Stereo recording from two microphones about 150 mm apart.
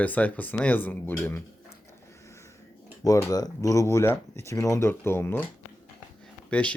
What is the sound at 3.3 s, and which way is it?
Speech, 25° left (ahead or behind).